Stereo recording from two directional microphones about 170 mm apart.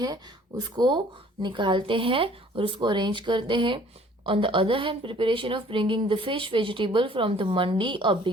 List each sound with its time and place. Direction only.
0.8 s a woman's voice: 25° right (ahead or behind)